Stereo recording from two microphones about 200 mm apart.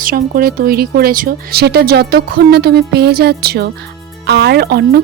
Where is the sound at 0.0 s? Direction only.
45° right (ahead or behind).